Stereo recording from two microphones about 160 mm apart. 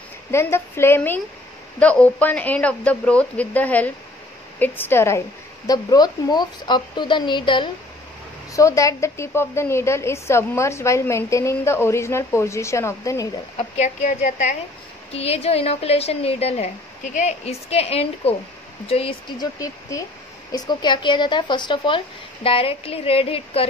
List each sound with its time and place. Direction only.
0.3 s a woman's voice: 15° left (ahead or behind)
8.5 s a woman's voice: 20° left (ahead or behind)
13.6 s a woman's voice: 45° left (ahead or behind)
19.6 s a woman's voice: 20° left (ahead or behind); by 23.7 s 35° left (ahead or behind)